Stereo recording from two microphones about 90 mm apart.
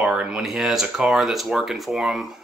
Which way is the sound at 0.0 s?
10° right (ahead or behind).